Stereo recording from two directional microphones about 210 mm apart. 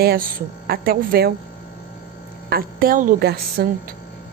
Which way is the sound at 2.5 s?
45° right (ahead or behind).